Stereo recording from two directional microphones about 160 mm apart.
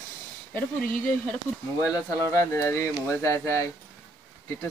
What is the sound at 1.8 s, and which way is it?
A woman's voice, 20° left (ahead or behind).